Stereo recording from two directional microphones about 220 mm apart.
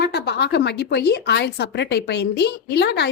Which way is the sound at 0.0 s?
45° left (ahead or behind).